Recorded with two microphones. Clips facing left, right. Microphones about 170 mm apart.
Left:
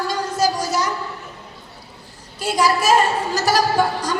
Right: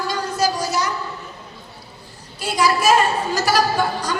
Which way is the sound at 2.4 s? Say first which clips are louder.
Even; 40° left (ahead or behind).